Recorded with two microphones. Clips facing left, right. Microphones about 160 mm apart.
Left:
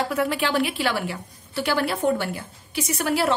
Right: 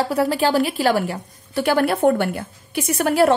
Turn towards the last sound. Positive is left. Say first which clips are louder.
# right 6 dB
turn(degrees=-50)  # may be behind; listen again after turning